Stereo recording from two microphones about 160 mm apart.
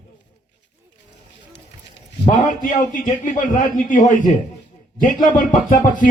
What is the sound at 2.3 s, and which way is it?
A man's voice, 55° left (ahead or behind).